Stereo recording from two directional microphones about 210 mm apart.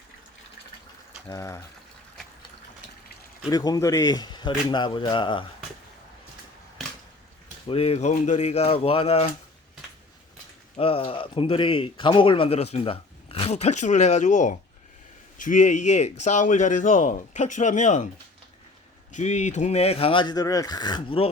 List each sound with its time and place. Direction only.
1.3 s speech: 15° left (ahead or behind)
3.5 s speech: 15° left (ahead or behind)
7.7 s speech: 30° left (ahead or behind)
10.8 s speech: 25° left (ahead or behind)
19.1 s speech: 35° left (ahead or behind)